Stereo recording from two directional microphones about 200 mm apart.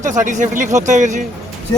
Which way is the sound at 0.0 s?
40° right (ahead or behind).